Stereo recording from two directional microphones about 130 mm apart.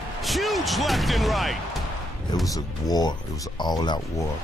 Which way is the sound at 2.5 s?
30° left (ahead or behind).